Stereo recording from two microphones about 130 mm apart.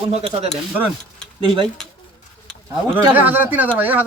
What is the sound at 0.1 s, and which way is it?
Speech, 50° right (ahead or behind).